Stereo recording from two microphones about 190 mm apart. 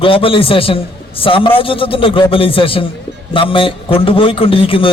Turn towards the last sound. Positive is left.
turn(degrees=30)  # may be behind; listen again after turning